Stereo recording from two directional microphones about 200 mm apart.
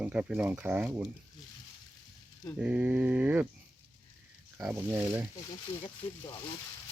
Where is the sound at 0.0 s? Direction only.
5° right (ahead or behind).